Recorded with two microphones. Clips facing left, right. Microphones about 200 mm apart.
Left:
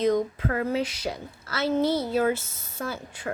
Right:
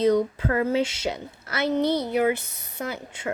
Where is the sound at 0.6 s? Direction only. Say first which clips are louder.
Right 4 dB; 25° right (ahead or behind).